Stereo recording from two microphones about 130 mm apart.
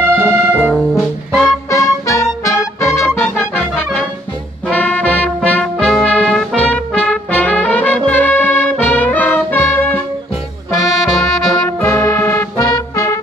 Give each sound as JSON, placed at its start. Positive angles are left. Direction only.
{"t": 0.0, "sound": "music", "side_deg": -15}
{"t": 1.4, "sound": "music", "side_deg": 25}
{"t": 10.8, "sound": "brass instrument", "side_deg": 0}
{"t": 11.8, "sound": "music", "side_deg": 20}